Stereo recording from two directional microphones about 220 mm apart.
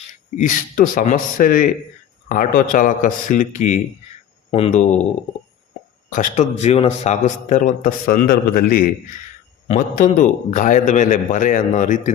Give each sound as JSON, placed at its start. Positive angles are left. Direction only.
{"t": 0.1, "sound": "a man's voice", "side_deg": 35}
{"t": 6.1, "sound": "a man's voice", "side_deg": 30}